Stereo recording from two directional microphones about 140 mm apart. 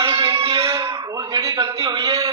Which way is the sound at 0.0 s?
35° right (ahead or behind).